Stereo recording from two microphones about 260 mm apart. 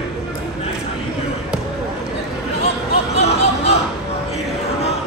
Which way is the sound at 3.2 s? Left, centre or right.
Left.